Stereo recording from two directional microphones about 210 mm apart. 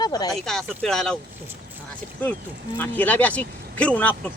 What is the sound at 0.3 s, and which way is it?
Speech, centre (ahead or behind).